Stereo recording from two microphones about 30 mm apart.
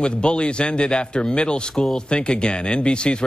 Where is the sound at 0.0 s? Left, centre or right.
Left.